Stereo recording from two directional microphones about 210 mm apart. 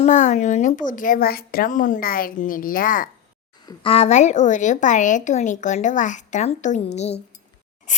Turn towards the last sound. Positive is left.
turn(degrees=30)  # may be behind; listen again after turning